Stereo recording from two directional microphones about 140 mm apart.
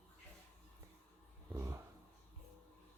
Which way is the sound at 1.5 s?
20° right (ahead or behind).